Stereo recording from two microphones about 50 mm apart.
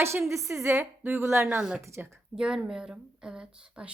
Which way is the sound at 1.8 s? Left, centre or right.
Right.